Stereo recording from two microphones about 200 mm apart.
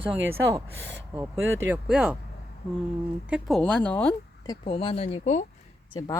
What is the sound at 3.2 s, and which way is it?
Speech, centre (ahead or behind).